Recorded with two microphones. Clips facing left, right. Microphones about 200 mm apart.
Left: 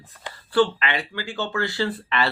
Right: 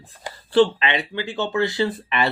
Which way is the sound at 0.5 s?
20° right (ahead or behind).